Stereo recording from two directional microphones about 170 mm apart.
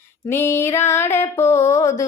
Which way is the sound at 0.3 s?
15° left (ahead or behind).